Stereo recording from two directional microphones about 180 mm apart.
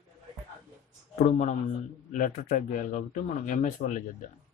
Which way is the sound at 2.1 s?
45° left (ahead or behind).